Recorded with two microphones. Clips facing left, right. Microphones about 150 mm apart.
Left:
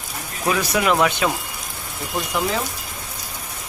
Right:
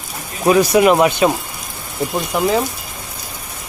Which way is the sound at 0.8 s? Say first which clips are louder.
Right 7 dB; 20° right (ahead or behind).